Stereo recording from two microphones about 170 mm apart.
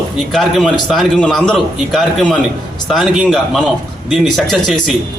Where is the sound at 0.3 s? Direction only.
Centre (ahead or behind).